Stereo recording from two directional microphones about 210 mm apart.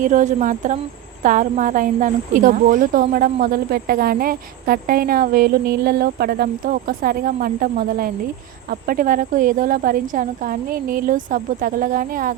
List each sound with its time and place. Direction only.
0.0 s a woman's voice: 35° right (ahead or behind)